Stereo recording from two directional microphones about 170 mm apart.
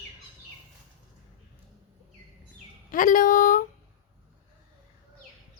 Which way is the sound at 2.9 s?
50° left (ahead or behind).